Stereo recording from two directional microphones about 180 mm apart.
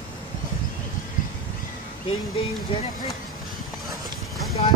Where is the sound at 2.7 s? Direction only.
30° left (ahead or behind).